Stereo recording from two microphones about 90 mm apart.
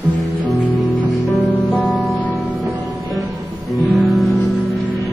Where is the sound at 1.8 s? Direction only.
Centre (ahead or behind).